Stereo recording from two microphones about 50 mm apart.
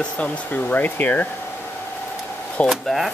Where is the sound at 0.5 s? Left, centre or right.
Left.